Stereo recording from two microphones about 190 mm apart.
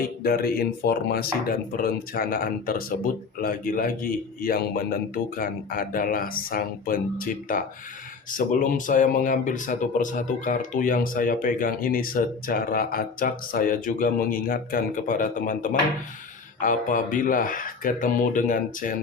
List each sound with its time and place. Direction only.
0.2 s speech: 50° left (ahead or behind)